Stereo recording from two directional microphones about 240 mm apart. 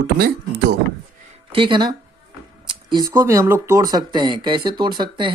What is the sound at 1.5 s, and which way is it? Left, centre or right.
Speech, right.